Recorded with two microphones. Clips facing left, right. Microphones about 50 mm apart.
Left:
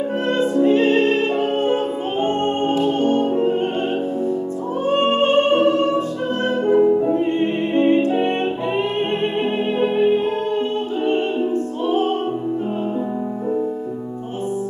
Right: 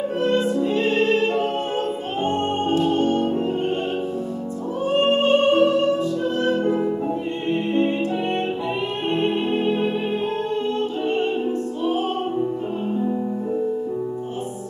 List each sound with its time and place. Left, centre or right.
0.2 s music: left
4.8 s music: left
9.2 s music: left